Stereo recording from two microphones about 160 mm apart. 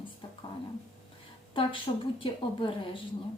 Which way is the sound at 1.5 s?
35° left (ahead or behind).